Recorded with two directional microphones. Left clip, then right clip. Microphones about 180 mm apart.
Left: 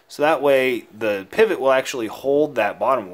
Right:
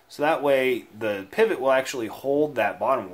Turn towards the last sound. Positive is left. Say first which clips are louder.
# left 4 dB
turn(degrees=30)  # may be behind; listen again after turning